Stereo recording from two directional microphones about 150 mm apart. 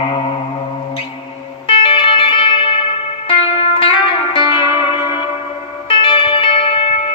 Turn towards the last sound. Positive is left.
turn(degrees=40)  # may be behind; listen again after turning